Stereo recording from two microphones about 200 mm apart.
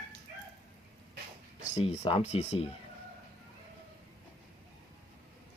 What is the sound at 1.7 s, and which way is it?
Speech, 30° left (ahead or behind).